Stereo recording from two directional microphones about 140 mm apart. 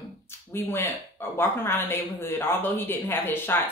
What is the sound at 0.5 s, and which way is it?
Speech, 15° left (ahead or behind).